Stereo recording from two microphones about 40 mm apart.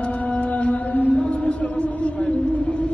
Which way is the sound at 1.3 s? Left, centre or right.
Left.